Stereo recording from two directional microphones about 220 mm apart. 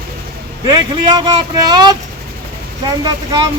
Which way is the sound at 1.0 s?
20° right (ahead or behind).